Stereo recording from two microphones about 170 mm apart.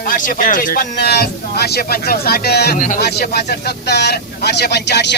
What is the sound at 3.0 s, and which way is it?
Speech, 70° left (ahead or behind).